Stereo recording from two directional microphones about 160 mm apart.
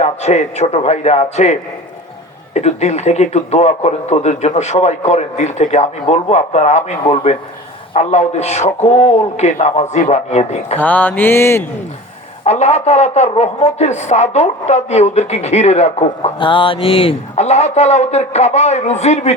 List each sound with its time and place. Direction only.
0.0 s a man's voice: 45° left (ahead or behind)
10.8 s mantra: 10° left (ahead or behind)
12.5 s a man's voice: 45° left (ahead or behind)